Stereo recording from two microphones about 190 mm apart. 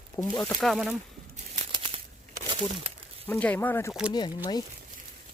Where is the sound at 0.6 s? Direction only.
Centre (ahead or behind).